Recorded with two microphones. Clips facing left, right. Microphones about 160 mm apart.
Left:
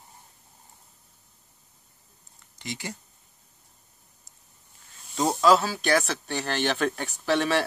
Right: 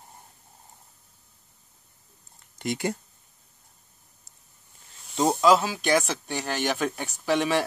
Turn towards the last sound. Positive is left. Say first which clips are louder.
# even
turn(degrees=-15)  # may be behind; listen again after turning